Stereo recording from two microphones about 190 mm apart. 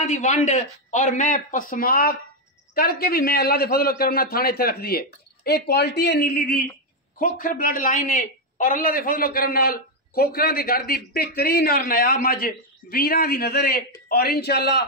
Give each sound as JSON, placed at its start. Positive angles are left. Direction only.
{"t": 0.0, "sound": "a man's voice", "side_deg": 40}